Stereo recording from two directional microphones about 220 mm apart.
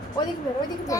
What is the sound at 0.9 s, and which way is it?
Speech, 15° left (ahead or behind).